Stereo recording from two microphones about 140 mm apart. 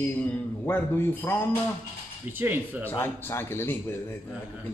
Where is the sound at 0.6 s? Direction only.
15° left (ahead or behind).